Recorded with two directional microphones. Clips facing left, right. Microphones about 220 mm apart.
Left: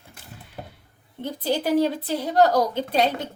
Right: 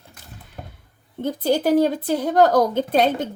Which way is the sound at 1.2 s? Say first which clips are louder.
Right 5 dB; 45° right (ahead or behind).